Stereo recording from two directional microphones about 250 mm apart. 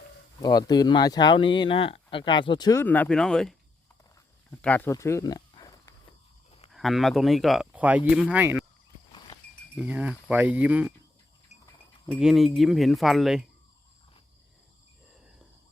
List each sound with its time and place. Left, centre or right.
0.4 s speech: centre
4.6 s speech: centre
6.7 s speech: centre
9.1 s livestock: centre
9.7 s speech: centre
12.2 s speech: centre